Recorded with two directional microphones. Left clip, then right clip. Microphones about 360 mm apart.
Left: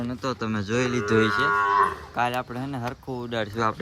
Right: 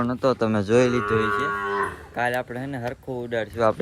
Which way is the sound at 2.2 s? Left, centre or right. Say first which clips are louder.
Right 2 dB; centre.